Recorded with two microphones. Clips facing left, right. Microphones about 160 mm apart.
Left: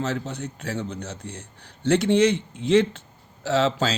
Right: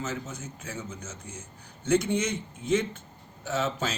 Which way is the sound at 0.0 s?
70° left (ahead or behind).